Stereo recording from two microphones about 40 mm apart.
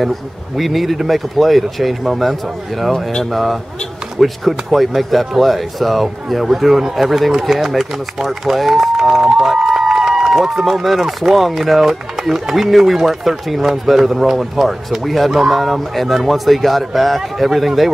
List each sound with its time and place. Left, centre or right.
0.6 s speech: centre
2.9 s a sound: centre
3.3 s speech: centre